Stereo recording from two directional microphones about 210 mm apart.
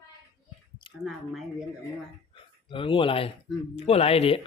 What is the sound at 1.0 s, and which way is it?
Speech, centre (ahead or behind).